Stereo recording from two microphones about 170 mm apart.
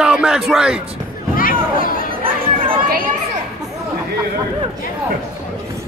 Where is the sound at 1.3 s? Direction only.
55° left (ahead or behind).